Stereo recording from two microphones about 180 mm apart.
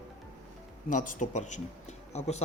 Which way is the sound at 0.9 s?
45° left (ahead or behind).